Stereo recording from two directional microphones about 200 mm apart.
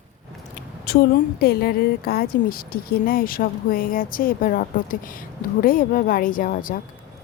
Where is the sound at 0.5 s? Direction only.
50° left (ahead or behind).